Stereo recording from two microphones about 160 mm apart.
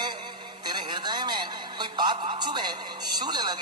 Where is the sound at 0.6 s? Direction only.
25° right (ahead or behind).